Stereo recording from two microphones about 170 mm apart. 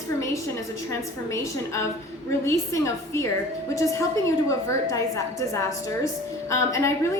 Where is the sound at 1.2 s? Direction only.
20° left (ahead or behind).